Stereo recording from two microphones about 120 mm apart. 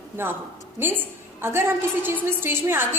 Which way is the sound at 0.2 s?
20° right (ahead or behind).